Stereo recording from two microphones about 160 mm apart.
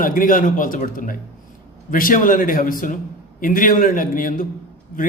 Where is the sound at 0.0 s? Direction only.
60° left (ahead or behind).